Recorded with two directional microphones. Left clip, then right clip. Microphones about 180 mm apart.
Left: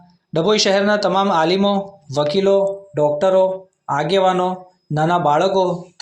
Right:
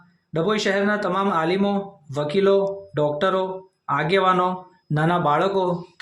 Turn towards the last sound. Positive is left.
turn(degrees=0)  # may be behind; listen again after turning